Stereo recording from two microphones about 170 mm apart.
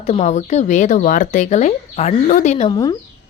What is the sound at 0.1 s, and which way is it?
A woman's voice, 40° left (ahead or behind).